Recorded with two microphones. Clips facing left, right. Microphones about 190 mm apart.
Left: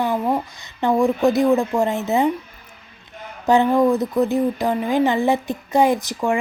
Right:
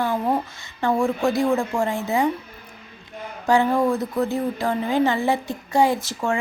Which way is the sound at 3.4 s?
20° left (ahead or behind).